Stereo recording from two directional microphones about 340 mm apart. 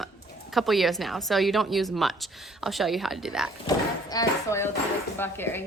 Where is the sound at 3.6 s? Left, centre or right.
Centre.